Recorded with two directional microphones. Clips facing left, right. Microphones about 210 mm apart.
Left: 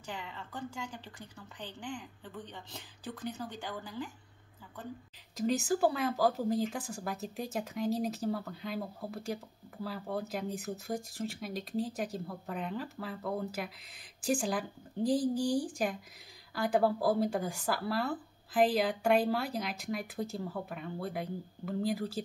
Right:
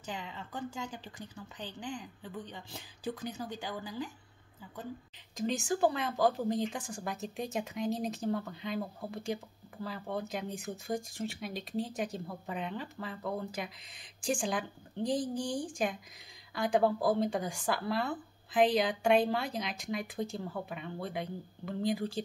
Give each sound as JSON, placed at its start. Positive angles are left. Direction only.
{"t": 0.0, "sound": "a woman's voice", "side_deg": -15}
{"t": 1.6, "sound": "a woman's voice", "side_deg": -15}
{"t": 5.3, "sound": "speech", "side_deg": 5}